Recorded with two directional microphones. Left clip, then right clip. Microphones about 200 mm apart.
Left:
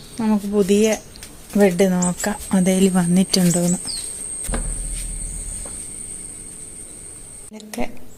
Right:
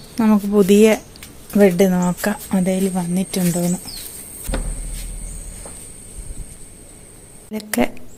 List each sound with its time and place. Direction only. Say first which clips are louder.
0.2 s speech: right 4 dB; 20° right (ahead or behind)
2.5 s speech: left 6 dB; 5° left (ahead or behind)
7.5 s a sound: right 11 dB; 35° right (ahead or behind)